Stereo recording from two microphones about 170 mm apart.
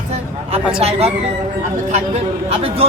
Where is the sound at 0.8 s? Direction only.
35° right (ahead or behind).